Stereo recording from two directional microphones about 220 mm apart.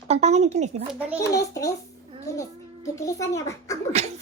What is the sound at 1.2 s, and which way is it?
A child's voice, 15° left (ahead or behind).